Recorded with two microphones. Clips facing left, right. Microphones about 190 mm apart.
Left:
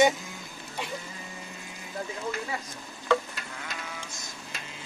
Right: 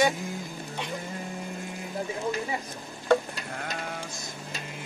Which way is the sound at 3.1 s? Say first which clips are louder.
Right 3 dB; 55° right (ahead or behind).